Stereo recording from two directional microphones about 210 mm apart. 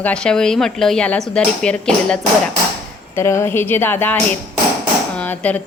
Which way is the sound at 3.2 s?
10° left (ahead or behind).